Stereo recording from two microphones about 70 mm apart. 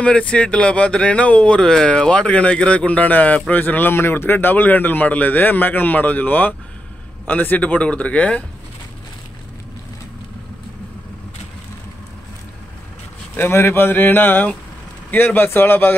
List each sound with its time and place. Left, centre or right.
0.0 s speech: centre
13.4 s speech: left